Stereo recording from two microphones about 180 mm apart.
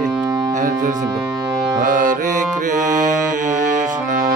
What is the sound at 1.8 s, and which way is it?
Music, 45° right (ahead or behind).